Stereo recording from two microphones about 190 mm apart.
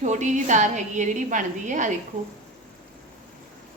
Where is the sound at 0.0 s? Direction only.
40° right (ahead or behind).